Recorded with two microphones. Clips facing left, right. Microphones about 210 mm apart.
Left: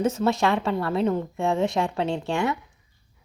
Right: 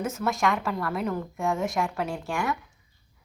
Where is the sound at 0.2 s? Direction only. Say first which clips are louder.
Left 4 dB; 25° left (ahead or behind).